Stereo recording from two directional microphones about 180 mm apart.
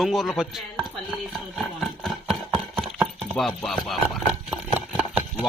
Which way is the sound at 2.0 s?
Centre (ahead or behind).